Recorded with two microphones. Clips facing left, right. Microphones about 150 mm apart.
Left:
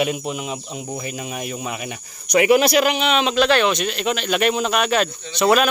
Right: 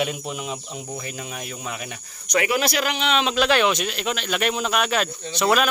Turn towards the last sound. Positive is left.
turn(degrees=0)  # may be behind; listen again after turning